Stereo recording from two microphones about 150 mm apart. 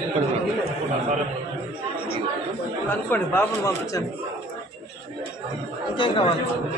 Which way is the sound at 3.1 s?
15° left (ahead or behind).